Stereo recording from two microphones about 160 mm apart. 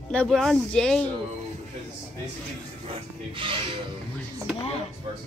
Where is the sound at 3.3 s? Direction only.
35° right (ahead or behind).